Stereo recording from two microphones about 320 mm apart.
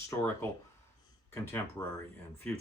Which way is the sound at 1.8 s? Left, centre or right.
Centre.